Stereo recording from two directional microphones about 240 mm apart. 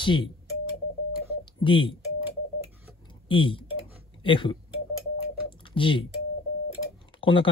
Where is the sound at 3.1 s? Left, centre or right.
Left.